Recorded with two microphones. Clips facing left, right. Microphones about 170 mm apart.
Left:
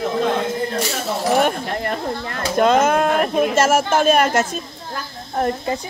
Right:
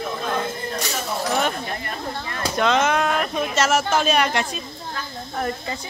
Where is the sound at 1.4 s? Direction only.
60° left (ahead or behind).